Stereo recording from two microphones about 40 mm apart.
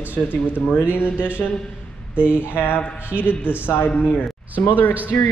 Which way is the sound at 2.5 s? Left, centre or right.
Left.